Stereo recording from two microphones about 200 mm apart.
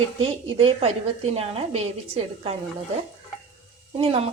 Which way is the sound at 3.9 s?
30° right (ahead or behind).